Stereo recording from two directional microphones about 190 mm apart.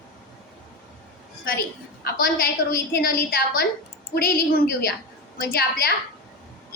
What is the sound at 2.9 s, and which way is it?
Speech, 50° left (ahead or behind).